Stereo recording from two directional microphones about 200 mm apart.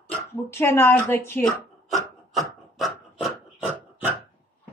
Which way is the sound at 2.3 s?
Centre (ahead or behind).